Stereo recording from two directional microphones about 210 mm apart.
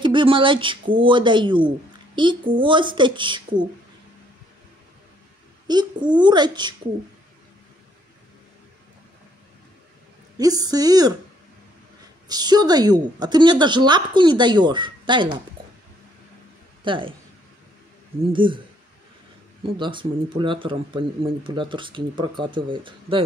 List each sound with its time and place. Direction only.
0.0 s speech: 25° right (ahead or behind)
5.7 s speech: 20° right (ahead or behind)
10.3 s a woman's voice: 15° right (ahead or behind)
12.3 s speech: 20° right (ahead or behind)
16.8 s a woman's voice: 25° right (ahead or behind)
18.2 s speech: 25° right (ahead or behind)
19.6 s speech: 25° right (ahead or behind)